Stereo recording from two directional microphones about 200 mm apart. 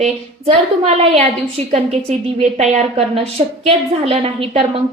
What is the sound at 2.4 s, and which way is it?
Speech, 35° right (ahead or behind).